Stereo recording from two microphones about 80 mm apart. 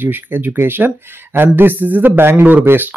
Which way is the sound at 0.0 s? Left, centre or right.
Right.